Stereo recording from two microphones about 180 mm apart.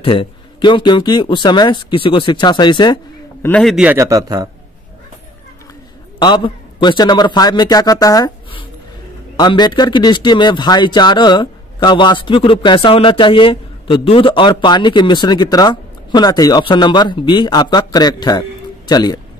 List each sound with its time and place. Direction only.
0.0 s speech: 30° left (ahead or behind)
3.4 s a man's voice: 5° left (ahead or behind)
3.7 s a man's voice: 10° right (ahead or behind)
6.1 s a man's voice: 25° left (ahead or behind)